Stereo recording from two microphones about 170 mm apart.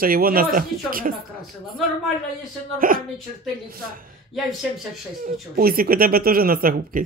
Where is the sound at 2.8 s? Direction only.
55° right (ahead or behind).